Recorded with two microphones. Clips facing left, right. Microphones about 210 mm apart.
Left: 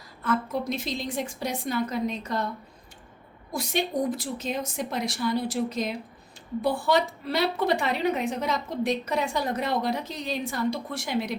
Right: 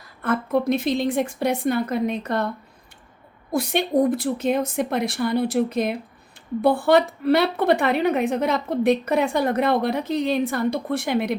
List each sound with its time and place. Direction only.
0.2 s a woman's voice: 60° right (ahead or behind)
3.5 s a woman's voice: 60° right (ahead or behind)